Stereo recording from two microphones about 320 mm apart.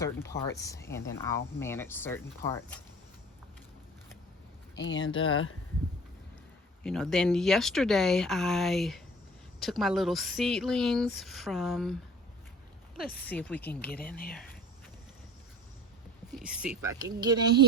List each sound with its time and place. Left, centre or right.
0.5 s speech: centre
4.7 s speech: left
6.8 s speech: centre
13.0 s speech: left
13.2 s speech: centre
16.3 s speech: centre